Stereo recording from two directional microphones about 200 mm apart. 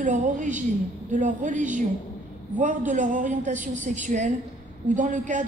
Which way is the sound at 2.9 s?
40° right (ahead or behind).